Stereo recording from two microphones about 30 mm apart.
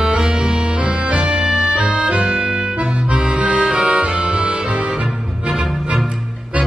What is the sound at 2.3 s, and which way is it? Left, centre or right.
Music, right.